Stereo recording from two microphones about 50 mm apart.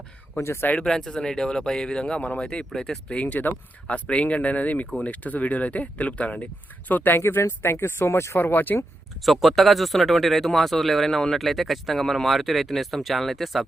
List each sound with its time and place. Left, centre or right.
0.3 s speech: left
0.9 s speech: centre
3.2 s speech: left
6.8 s speech: left
8.4 s speech: left
9.2 s speech: centre